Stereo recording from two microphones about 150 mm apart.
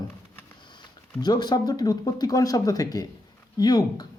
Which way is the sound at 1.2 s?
25° left (ahead or behind).